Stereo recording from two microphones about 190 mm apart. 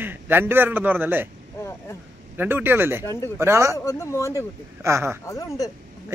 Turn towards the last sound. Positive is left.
turn(degrees=20)  # may be behind; listen again after turning